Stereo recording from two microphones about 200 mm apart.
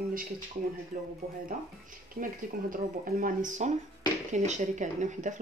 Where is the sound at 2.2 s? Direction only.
45° right (ahead or behind).